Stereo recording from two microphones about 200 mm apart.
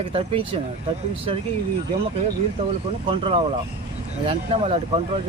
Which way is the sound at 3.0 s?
25° right (ahead or behind).